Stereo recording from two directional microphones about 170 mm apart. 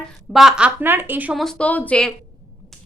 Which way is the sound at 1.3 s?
5° left (ahead or behind).